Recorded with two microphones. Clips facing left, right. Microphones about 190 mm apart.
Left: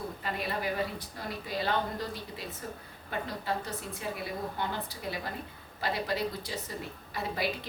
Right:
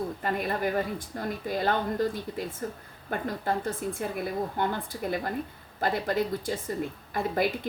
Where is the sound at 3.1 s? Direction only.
50° right (ahead or behind).